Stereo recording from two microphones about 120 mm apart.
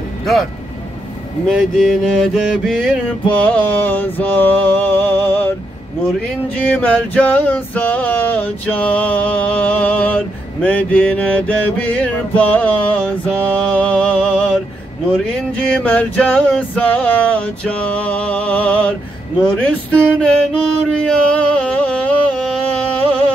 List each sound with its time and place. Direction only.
0.2 s speech: centre (ahead or behind)
1.5 s mantra: centre (ahead or behind)
3.3 s music: 10° left (ahead or behind)
6.5 s music: 15° left (ahead or behind)
15.6 s music: 10° left (ahead or behind)
19.6 s a sound: 10° left (ahead or behind)